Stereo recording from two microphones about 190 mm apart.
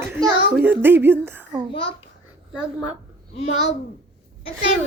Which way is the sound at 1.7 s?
25° left (ahead or behind).